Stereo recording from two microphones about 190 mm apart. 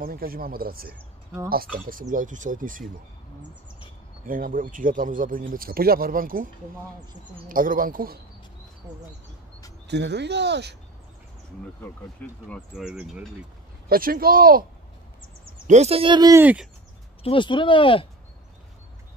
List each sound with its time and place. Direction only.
0.0 s speech: 50° right (ahead or behind)
4.3 s speech: 45° right (ahead or behind)
9.8 s speech: 65° right (ahead or behind)
11.8 s speech: 10° left (ahead or behind)
12.7 s speech: 5° right (ahead or behind)
13.8 s speech: 50° right (ahead or behind)
15.6 s speech: 35° right (ahead or behind); by 16.6 s 10° right (ahead or behind)
17.2 s speech: 25° left (ahead or behind)